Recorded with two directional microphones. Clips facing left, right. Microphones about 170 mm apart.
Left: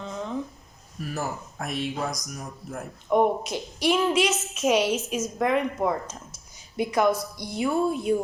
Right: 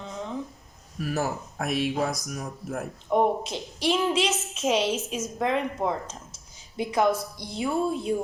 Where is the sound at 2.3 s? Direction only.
60° right (ahead or behind).